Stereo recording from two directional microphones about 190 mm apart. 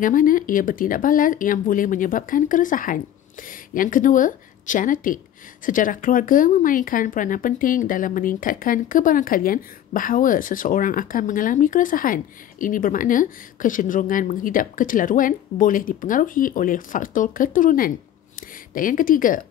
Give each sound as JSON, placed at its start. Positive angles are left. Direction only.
{"t": 0.0, "sound": "speech", "side_deg": 45}